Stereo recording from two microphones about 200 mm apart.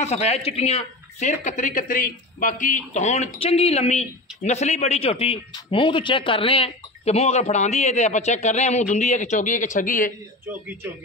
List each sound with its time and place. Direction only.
0.0 s speech: 30° left (ahead or behind)